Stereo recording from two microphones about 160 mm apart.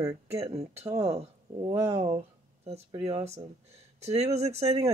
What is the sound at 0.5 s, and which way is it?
Speech, 40° right (ahead or behind).